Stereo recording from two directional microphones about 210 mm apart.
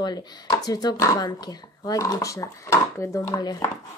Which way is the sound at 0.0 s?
20° left (ahead or behind).